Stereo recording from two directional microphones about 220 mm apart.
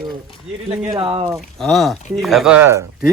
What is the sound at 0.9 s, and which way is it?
Speech, 20° right (ahead or behind).